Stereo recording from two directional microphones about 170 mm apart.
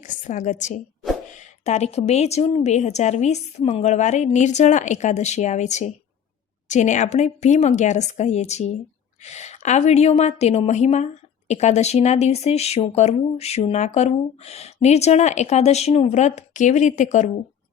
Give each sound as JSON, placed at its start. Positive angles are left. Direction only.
{"t": 0.0, "sound": "a woman's voice", "side_deg": 50}